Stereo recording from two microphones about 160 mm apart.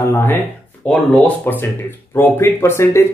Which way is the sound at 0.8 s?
5° left (ahead or behind).